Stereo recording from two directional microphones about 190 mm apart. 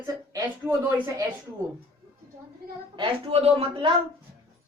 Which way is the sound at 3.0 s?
30° right (ahead or behind).